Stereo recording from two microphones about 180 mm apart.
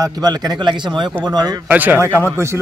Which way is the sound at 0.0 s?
20° right (ahead or behind).